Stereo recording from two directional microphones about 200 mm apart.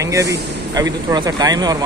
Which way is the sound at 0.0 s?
15° right (ahead or behind).